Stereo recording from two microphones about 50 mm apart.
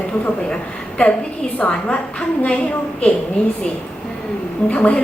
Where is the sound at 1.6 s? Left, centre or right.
Left.